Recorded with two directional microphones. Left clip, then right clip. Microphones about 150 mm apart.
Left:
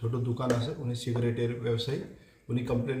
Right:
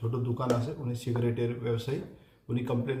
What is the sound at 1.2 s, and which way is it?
Speech, centre (ahead or behind).